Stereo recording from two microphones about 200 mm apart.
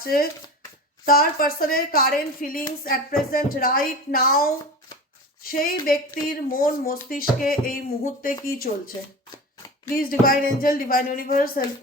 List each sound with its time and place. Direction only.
0.0 s a woman's voice: 45° left (ahead or behind)
9.9 s speech: 45° left (ahead or behind)